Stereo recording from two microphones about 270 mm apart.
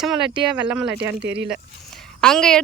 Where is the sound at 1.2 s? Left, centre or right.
Right.